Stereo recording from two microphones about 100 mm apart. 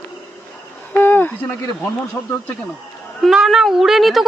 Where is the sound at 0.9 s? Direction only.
20° left (ahead or behind).